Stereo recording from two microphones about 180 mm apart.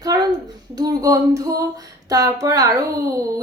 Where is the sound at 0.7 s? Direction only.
20° right (ahead or behind).